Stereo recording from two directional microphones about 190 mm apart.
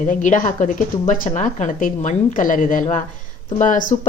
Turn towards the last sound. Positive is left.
turn(degrees=40)  # may be behind; listen again after turning